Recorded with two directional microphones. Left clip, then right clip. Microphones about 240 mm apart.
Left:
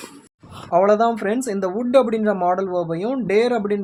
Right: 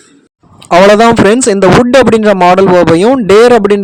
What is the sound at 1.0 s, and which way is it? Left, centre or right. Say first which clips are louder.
Speech: right 14 dB; right.